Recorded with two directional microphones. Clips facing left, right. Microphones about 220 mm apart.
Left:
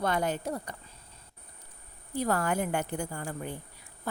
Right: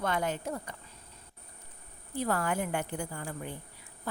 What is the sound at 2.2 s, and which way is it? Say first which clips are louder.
A woman's voice: left 2 dB; 40° left (ahead or behind).